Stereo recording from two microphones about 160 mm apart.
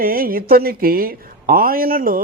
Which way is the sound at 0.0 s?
65° right (ahead or behind).